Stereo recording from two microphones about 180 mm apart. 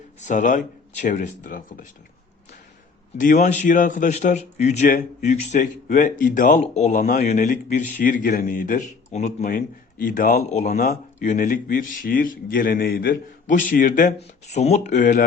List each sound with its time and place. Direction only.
0.2 s a man's voice: 45° left (ahead or behind)
3.2 s a man's voice: 45° left (ahead or behind)